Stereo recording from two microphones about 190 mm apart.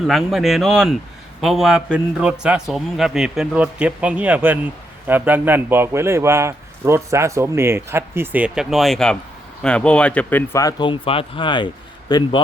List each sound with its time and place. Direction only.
0.0 s a man's voice: centre (ahead or behind); by 12.4 s 25° left (ahead or behind)